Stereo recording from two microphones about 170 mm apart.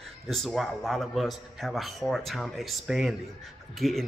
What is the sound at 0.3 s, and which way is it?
A man's voice, centre (ahead or behind).